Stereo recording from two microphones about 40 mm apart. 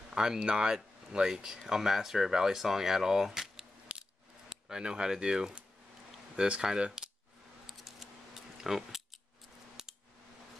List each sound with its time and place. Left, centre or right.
0.1 s speech: centre
4.5 s speech: centre
7.6 s scissors: centre
8.6 s a sound: centre
9.8 s scissors: centre